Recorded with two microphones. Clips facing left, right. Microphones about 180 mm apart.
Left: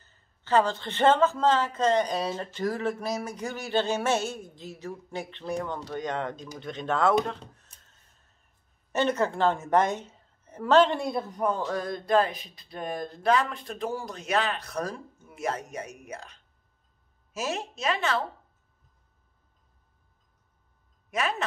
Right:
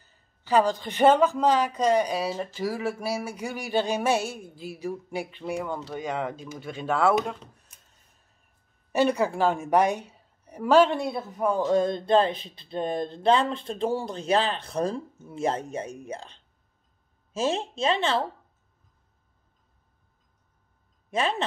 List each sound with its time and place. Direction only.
0.0 s speech: 15° right (ahead or behind)
8.9 s speech: 10° right (ahead or behind)
11.7 s speech: 25° right (ahead or behind)
21.1 s speech: 30° right (ahead or behind)